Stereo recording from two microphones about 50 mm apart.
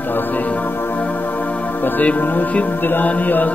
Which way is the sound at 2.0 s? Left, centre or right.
Left.